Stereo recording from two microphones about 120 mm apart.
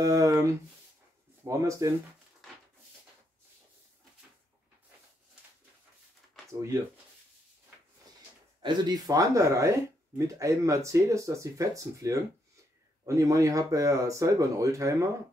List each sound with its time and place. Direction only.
0.0 s speech: 30° right (ahead or behind)
6.4 s a sound: 5° left (ahead or behind)
8.6 s speech: 35° right (ahead or behind)